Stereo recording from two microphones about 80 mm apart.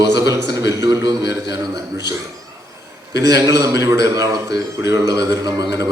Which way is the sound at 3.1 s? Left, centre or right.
Right.